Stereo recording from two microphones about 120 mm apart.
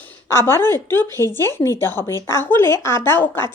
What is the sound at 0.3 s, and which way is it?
Speech, 20° left (ahead or behind).